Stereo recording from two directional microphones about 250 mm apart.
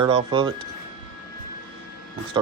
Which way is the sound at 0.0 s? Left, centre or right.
Right.